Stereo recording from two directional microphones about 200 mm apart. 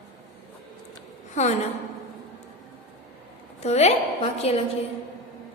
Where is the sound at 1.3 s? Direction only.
35° left (ahead or behind).